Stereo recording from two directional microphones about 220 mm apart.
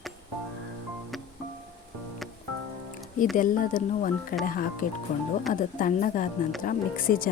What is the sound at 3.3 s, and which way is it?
Speech, 35° left (ahead or behind).